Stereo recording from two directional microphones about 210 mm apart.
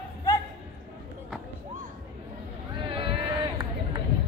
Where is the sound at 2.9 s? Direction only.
25° right (ahead or behind).